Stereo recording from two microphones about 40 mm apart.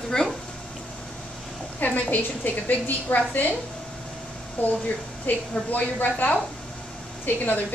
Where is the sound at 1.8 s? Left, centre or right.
Left.